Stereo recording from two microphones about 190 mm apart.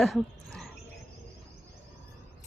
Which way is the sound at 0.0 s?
Centre (ahead or behind).